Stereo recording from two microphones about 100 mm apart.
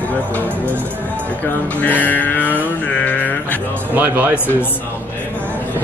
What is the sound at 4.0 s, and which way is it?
Speech, 20° right (ahead or behind).